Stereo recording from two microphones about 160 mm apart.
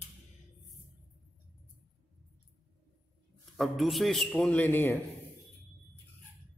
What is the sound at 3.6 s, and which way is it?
A man's voice, centre (ahead or behind).